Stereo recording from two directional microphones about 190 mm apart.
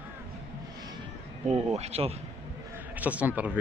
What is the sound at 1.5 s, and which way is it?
Speech, 35° right (ahead or behind).